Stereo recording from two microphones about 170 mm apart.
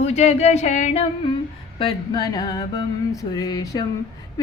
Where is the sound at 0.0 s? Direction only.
40° left (ahead or behind).